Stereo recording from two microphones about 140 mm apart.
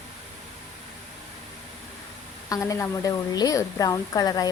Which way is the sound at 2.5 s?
20° left (ahead or behind).